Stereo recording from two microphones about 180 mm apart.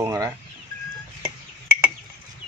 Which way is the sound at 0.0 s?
15° right (ahead or behind).